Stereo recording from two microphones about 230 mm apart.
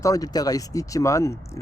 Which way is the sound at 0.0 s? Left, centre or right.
Centre.